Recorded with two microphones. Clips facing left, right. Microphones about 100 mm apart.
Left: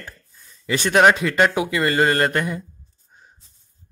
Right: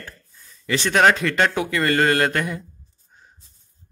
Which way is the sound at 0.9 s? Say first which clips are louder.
Left 2 dB; 10° left (ahead or behind).